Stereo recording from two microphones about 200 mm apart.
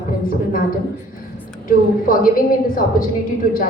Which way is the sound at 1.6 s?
45° left (ahead or behind).